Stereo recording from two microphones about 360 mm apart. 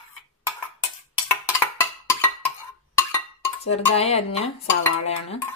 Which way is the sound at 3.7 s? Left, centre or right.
Centre.